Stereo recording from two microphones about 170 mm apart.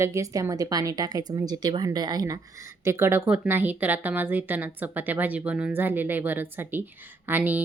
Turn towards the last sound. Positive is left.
turn(degrees=-10)  # may be behind; listen again after turning